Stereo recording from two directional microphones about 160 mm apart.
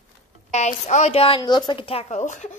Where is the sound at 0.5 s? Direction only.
45° left (ahead or behind).